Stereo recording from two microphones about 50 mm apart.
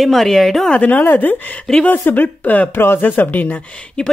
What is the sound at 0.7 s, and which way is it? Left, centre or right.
Speech, left.